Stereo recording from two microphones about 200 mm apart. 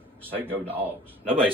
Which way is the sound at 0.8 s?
25° right (ahead or behind).